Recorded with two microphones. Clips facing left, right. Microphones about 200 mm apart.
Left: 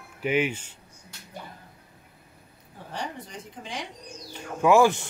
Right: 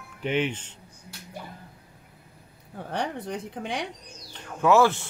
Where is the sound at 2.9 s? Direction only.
60° right (ahead or behind).